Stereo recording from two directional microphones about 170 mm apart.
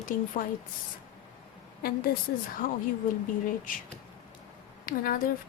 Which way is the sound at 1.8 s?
60° left (ahead or behind).